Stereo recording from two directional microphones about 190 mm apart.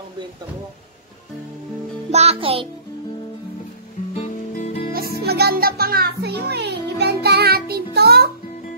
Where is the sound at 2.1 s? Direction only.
35° right (ahead or behind).